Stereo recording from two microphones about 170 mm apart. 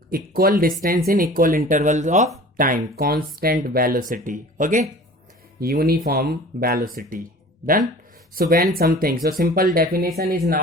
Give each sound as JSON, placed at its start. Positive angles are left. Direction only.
{"t": 0.1, "sound": "speech", "side_deg": -60}
{"t": 2.6, "sound": "speech", "side_deg": -55}
{"t": 5.5, "sound": "speech", "side_deg": -60}
{"t": 8.4, "sound": "speech", "side_deg": -60}